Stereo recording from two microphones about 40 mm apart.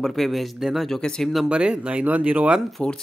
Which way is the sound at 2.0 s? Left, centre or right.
Right.